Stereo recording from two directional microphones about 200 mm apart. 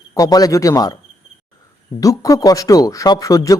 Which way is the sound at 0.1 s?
20° left (ahead or behind).